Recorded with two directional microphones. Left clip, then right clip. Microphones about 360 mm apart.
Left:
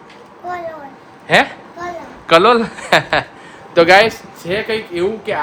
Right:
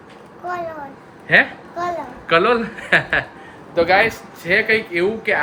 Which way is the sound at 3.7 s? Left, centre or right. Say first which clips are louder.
Left 6 dB; left.